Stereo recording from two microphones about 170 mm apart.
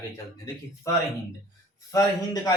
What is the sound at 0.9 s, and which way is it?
Speech, 20° left (ahead or behind).